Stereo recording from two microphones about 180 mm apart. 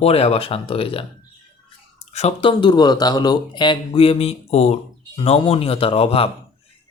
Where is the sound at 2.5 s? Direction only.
25° left (ahead or behind).